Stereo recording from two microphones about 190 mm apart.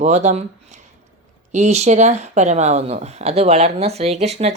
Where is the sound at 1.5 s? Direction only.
35° right (ahead or behind).